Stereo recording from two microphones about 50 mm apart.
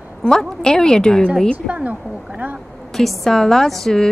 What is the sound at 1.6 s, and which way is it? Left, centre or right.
Speech, right.